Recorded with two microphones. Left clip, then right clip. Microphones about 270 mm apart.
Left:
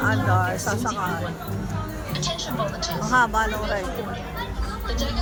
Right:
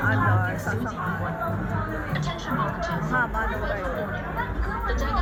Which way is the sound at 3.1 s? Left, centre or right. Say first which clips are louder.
Left 7 dB; centre.